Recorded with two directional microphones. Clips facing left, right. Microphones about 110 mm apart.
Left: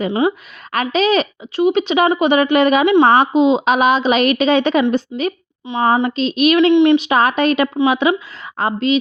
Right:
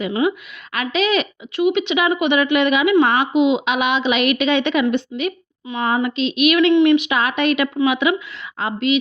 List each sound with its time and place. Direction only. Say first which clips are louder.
0.0 s a woman's voice: left 2 dB; 35° left (ahead or behind)